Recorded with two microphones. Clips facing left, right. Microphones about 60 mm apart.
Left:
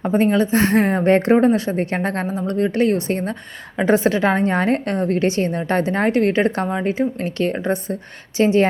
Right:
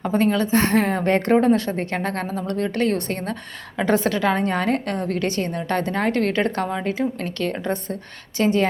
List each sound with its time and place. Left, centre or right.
0.0 s a woman's voice: left